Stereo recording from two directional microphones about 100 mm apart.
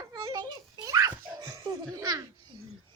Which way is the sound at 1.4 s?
40° right (ahead or behind).